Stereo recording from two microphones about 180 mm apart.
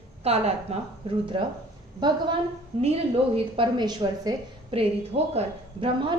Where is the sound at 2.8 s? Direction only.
35° right (ahead or behind).